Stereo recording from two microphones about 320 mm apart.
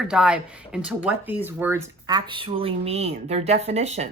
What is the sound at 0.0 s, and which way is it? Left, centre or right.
Speech, centre.